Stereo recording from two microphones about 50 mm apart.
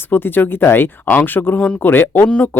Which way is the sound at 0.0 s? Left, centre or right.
Left.